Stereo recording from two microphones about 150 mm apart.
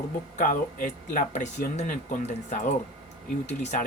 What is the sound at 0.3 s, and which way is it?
Speech, 60° left (ahead or behind).